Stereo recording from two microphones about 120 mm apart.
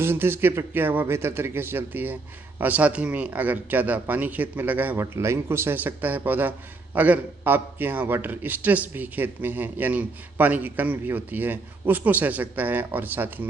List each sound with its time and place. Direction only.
0.0 s a man's voice: 20° right (ahead or behind)